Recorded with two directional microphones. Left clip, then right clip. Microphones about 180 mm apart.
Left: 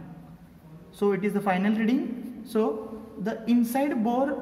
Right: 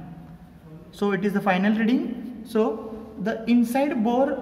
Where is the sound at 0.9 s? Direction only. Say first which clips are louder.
Right 1 dB; 5° left (ahead or behind).